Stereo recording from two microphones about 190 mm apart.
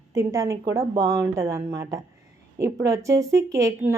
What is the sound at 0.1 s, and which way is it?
A woman's voice, 15° right (ahead or behind).